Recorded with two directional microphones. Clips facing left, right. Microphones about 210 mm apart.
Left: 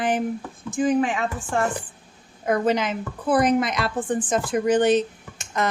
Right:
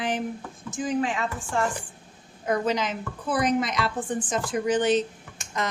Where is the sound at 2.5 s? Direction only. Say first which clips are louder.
Left 4 dB; 55° left (ahead or behind).